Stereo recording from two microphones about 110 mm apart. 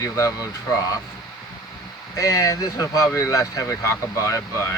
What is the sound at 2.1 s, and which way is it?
Speech, 30° left (ahead or behind).